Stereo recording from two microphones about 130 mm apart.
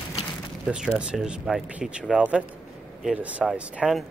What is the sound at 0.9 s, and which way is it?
Speech, 5° right (ahead or behind).